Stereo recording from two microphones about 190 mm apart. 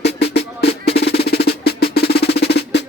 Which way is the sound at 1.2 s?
55° left (ahead or behind).